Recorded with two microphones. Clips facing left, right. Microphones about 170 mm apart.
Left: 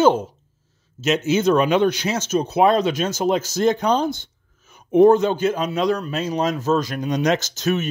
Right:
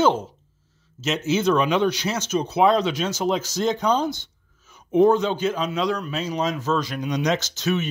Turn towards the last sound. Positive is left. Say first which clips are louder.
# left 2 dB
turn(degrees=45)  # may be behind; listen again after turning